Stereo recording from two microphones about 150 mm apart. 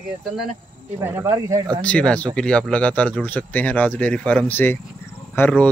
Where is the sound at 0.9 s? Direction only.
15° right (ahead or behind).